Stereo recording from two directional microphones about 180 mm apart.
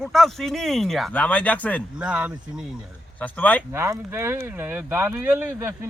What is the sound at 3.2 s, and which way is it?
Speech, 10° left (ahead or behind).